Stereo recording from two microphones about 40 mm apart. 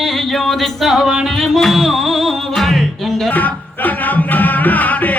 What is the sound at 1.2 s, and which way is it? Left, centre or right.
Music, centre.